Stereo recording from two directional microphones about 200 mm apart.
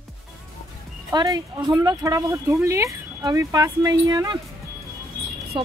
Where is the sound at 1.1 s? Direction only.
20° right (ahead or behind).